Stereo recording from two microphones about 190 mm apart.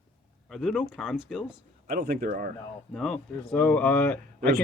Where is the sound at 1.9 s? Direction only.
50° right (ahead or behind).